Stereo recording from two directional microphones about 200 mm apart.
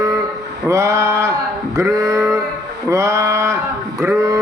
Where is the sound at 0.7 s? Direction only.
15° right (ahead or behind).